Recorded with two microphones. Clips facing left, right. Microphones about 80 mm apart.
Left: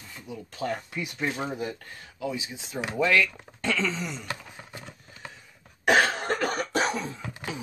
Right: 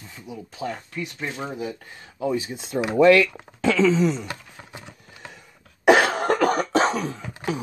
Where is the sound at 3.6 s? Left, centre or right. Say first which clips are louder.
Right 10 dB; right.